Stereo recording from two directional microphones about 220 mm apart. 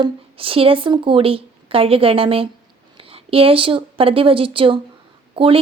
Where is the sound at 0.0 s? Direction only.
25° right (ahead or behind).